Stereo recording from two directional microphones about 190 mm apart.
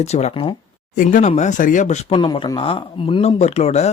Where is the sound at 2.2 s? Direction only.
25° left (ahead or behind).